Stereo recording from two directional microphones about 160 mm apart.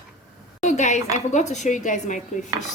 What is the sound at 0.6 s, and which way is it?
A woman's voice, 50° left (ahead or behind).